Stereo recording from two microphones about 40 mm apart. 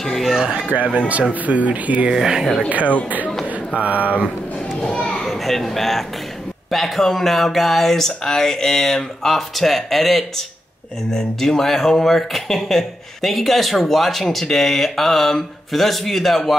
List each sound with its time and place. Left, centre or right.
0.0 s speech: centre
0.5 s speech: right
2.1 s speech: centre
3.7 s speech: right
4.8 s a child's voice: centre